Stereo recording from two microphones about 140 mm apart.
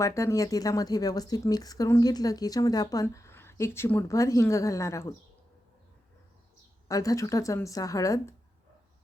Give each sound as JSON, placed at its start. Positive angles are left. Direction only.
{"t": 0.0, "sound": "speech", "side_deg": 20}
{"t": 6.8, "sound": "speech", "side_deg": 25}